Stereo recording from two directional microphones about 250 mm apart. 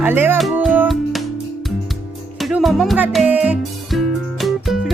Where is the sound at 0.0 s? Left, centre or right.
Centre.